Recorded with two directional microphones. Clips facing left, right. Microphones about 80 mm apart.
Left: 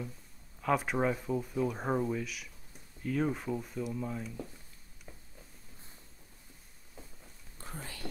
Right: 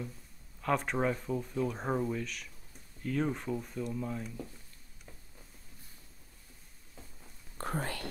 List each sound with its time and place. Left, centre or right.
0.6 s speech: centre
7.0 s a sound: centre
7.5 s speech: right